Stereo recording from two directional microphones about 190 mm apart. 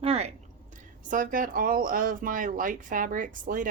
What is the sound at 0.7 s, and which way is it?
Speech, 45° right (ahead or behind).